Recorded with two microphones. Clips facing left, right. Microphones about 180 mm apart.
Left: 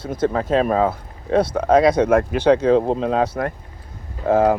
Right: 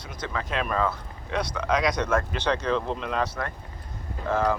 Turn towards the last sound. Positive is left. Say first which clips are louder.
# left 9 dB
turn(degrees=50)  # may be behind; listen again after turning